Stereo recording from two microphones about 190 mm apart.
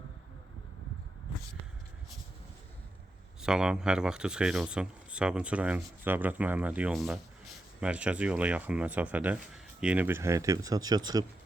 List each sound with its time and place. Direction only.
3.4 s speech: 5° right (ahead or behind); by 11.3 s 20° right (ahead or behind)